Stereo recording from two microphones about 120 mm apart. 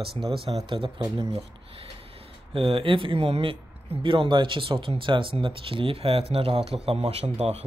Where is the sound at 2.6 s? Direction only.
50° right (ahead or behind).